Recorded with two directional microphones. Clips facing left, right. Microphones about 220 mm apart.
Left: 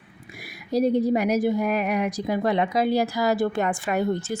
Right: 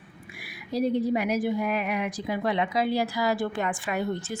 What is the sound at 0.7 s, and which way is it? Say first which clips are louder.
A woman's voice: left 4 dB; 40° left (ahead or behind).